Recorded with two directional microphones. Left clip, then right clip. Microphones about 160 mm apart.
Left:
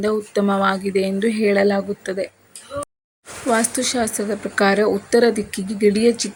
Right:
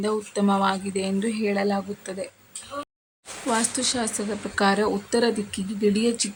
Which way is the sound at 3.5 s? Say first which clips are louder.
Left 5 dB; 20° left (ahead or behind).